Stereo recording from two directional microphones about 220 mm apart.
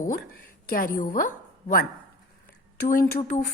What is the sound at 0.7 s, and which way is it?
A woman's voice, 40° left (ahead or behind).